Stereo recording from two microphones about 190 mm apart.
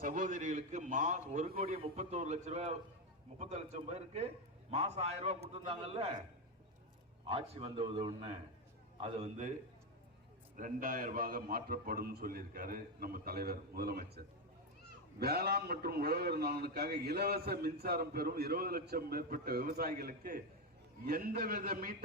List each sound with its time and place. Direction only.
0.0 s a man's voice: 45° right (ahead or behind)
7.3 s a man's voice: 30° right (ahead or behind)
10.6 s a man's voice: 45° right (ahead or behind)
15.2 s a man's voice: 55° right (ahead or behind)